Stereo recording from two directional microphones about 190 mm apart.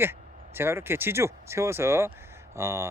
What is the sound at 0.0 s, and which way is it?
Speech, 10° right (ahead or behind).